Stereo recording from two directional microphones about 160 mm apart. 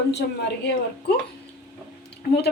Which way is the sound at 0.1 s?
90° left.